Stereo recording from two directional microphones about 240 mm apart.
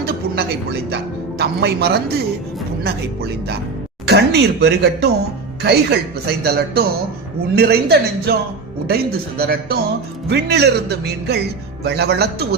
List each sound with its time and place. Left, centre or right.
0.0 s a woman's voice: right
4.0 s speech: right